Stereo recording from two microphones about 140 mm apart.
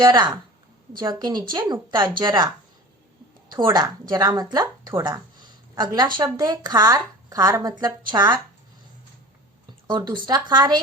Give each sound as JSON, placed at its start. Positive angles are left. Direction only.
{"t": 0.0, "sound": "a woman's voice", "side_deg": -30}
{"t": 3.5, "sound": "a woman's voice", "side_deg": -30}
{"t": 9.8, "sound": "a woman's voice", "side_deg": -35}